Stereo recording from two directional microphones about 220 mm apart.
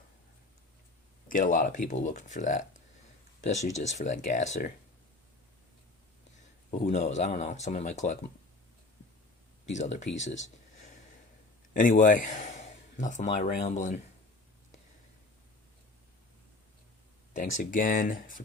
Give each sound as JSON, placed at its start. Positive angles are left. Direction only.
{"t": 1.3, "sound": "speech", "side_deg": 35}
{"t": 6.7, "sound": "speech", "side_deg": 30}
{"t": 9.6, "sound": "speech", "side_deg": 30}
{"t": 11.7, "sound": "speech", "side_deg": 35}
{"t": 17.3, "sound": "speech", "side_deg": 35}